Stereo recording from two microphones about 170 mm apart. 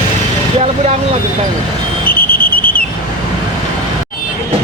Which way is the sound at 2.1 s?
60° left (ahead or behind).